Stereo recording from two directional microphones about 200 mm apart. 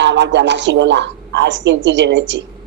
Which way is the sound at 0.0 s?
60° right (ahead or behind).